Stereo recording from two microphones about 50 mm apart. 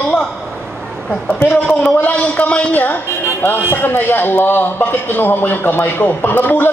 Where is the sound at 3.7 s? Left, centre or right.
Left.